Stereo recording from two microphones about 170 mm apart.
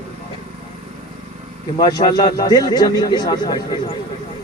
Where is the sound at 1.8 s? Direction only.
25° left (ahead or behind).